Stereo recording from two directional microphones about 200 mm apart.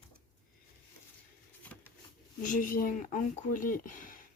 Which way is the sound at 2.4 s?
40° left (ahead or behind).